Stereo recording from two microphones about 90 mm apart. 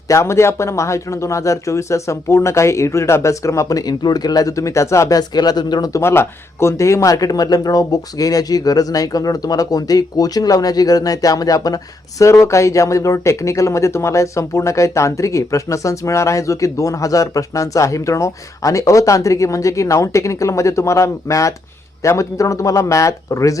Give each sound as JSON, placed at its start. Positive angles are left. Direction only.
{"t": 0.1, "sound": "speech", "side_deg": 30}
{"t": 5.9, "sound": "speech", "side_deg": 30}